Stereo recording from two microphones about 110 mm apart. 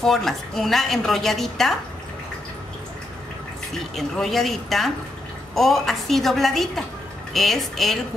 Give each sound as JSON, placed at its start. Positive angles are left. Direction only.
{"t": 0.0, "sound": "a woman's voice", "side_deg": 5}
{"t": 3.7, "sound": "a woman's voice", "side_deg": 0}